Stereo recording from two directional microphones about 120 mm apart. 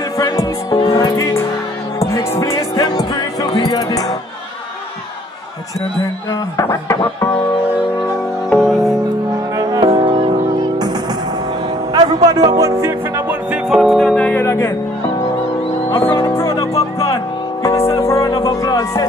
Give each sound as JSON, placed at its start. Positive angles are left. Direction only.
{"t": 0.2, "sound": "speech", "side_deg": 30}
{"t": 2.1, "sound": "music", "side_deg": 25}
{"t": 6.5, "sound": "speech", "side_deg": 25}
{"t": 8.5, "sound": "music", "side_deg": 5}
{"t": 9.6, "sound": "music", "side_deg": -30}
{"t": 9.8, "sound": "music", "side_deg": -45}
{"t": 11.9, "sound": "music", "side_deg": -35}
{"t": 13.5, "sound": "music", "side_deg": -5}
{"t": 14.4, "sound": "speech", "side_deg": 25}
{"t": 16.2, "sound": "music", "side_deg": 25}
{"t": 17.6, "sound": "music", "side_deg": 25}